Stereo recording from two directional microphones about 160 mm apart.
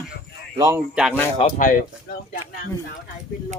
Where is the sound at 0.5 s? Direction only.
20° right (ahead or behind).